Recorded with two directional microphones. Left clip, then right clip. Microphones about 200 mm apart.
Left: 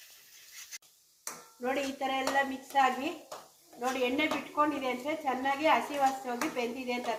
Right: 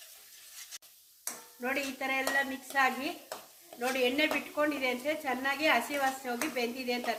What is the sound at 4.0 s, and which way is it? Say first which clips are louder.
A woman's voice: right 2 dB; 30° right (ahead or behind).